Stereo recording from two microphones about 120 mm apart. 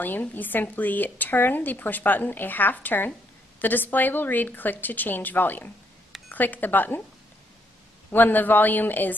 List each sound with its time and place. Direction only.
0.0 s speech: 15° left (ahead or behind)
8.1 s speech: 15° left (ahead or behind)